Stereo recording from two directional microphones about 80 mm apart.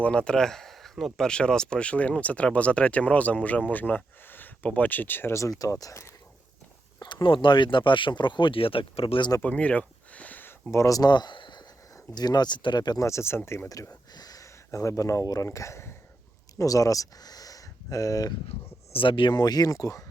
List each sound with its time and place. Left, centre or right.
0.0 s speech: centre
5.3 s speech: left
7.0 s speech: left
9.4 s speech: centre
10.7 s speech: left
11.1 s speech: left
12.1 s speech: left
13.0 s speech: left
13.7 s speech: left
18.9 s speech: left